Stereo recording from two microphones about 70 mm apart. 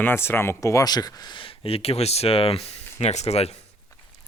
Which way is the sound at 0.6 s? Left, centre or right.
Left.